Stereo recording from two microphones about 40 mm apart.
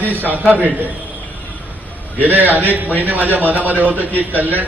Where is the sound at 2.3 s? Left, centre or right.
Right.